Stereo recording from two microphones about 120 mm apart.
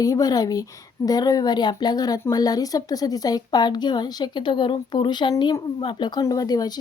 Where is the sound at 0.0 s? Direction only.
30° left (ahead or behind).